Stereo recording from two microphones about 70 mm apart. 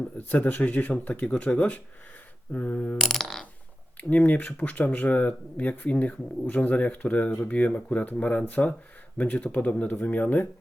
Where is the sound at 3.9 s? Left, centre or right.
Left.